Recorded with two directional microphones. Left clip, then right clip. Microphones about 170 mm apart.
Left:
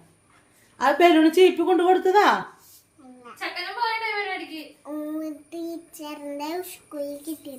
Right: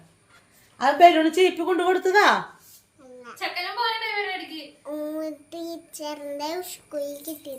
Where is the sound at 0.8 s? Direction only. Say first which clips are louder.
Right 2 dB; 30° left (ahead or behind).